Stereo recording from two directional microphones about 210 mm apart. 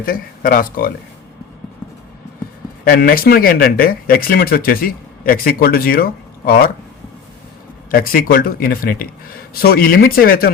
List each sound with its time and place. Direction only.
0.0 s speech: 45° left (ahead or behind)
2.8 s speech: 45° left (ahead or behind)
7.9 s speech: 45° left (ahead or behind)